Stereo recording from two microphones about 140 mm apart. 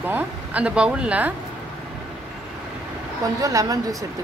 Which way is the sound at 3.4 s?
25° right (ahead or behind).